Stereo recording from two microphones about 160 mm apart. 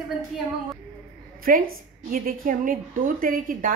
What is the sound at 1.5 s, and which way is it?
A woman's voice, 60° right (ahead or behind).